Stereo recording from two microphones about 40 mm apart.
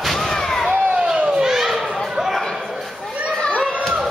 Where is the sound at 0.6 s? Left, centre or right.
Right.